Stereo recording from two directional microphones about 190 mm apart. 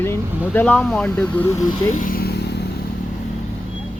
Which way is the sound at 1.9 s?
45° left (ahead or behind).